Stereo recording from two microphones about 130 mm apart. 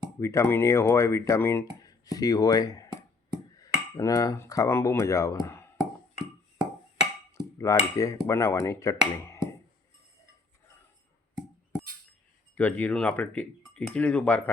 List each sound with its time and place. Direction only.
0.2 s speech: 20° left (ahead or behind)
3.6 s cutlery: 30° left (ahead or behind)
7.3 s cutlery: 25° left (ahead or behind)
7.9 s speech: 25° left (ahead or behind)
12.5 s speech: 10° left (ahead or behind)